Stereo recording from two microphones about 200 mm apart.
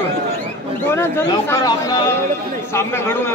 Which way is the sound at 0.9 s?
10° left (ahead or behind).